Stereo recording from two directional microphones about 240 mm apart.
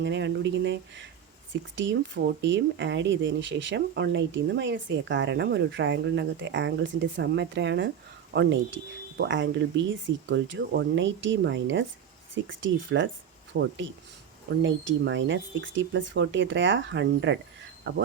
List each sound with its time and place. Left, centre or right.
0.0 s speech: right